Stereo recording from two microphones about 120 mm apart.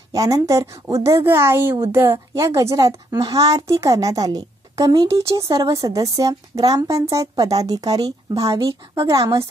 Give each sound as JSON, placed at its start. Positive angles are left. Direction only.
{"t": 0.1, "sound": "speech", "side_deg": -30}